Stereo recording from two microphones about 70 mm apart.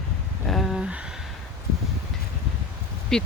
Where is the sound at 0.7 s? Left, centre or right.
Centre.